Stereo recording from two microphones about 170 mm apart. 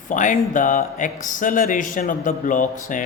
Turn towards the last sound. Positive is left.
turn(degrees=50)  # may be behind; listen again after turning